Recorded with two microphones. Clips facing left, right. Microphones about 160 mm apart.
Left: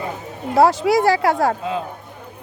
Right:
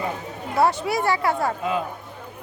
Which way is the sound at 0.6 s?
90° left.